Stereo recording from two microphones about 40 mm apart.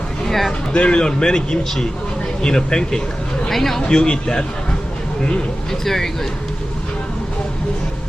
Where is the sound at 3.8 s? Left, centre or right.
Centre.